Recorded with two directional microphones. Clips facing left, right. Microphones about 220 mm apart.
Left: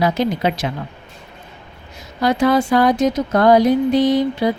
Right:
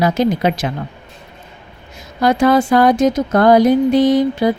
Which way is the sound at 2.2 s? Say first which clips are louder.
Right 3 dB; 50° right (ahead or behind).